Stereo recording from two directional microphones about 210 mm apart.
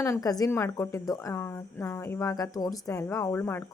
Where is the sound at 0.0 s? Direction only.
15° left (ahead or behind).